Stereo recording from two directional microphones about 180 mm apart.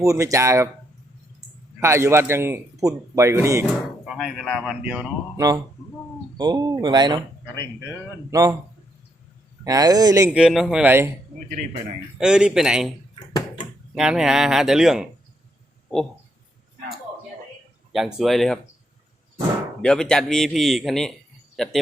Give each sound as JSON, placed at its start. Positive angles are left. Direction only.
{"t": 0.0, "sound": "speech", "side_deg": -15}
{"t": 1.8, "sound": "speech", "side_deg": -15}
{"t": 4.1, "sound": "speech", "side_deg": 0}
{"t": 6.3, "sound": "speech", "side_deg": -25}
{"t": 8.3, "sound": "speech", "side_deg": -20}
{"t": 9.6, "sound": "speech", "side_deg": -20}
{"t": 10.3, "sound": "speech", "side_deg": -5}
{"t": 12.1, "sound": "speech", "side_deg": -5}
{"t": 13.1, "sound": "a sound", "side_deg": 25}
{"t": 13.9, "sound": "speech", "side_deg": -5}
{"t": 17.9, "sound": "speech", "side_deg": 0}
{"t": 19.8, "sound": "speech", "side_deg": 5}
{"t": 21.5, "sound": "a sound", "side_deg": 0}